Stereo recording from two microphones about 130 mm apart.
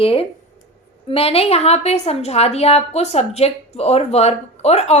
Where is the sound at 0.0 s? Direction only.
45° left (ahead or behind).